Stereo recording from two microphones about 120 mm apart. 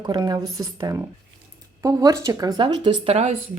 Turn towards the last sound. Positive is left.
turn(degrees=-60)  # may be behind; listen again after turning